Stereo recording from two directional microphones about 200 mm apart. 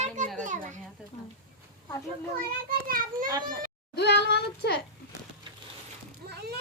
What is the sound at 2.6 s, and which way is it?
Speech, 45° right (ahead or behind).